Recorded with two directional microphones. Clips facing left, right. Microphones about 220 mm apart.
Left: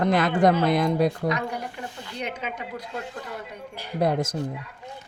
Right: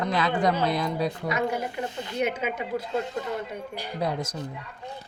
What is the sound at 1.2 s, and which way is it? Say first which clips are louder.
A woman's voice: even; 5° right (ahead or behind).